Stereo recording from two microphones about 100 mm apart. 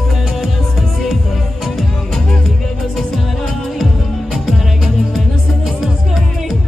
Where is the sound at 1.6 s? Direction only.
5° left (ahead or behind).